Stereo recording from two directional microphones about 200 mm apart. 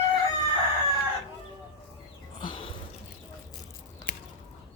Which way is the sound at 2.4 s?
25° left (ahead or behind).